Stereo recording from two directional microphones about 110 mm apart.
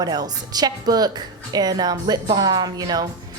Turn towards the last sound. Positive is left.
turn(degrees=-35)  # may be behind; listen again after turning